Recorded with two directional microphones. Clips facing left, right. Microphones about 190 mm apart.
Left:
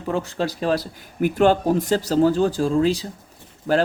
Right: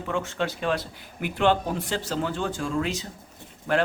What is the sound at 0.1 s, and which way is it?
Speech, 35° left (ahead or behind).